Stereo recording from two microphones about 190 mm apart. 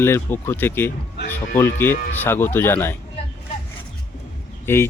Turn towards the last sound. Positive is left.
turn(degrees=10)  # may be behind; listen again after turning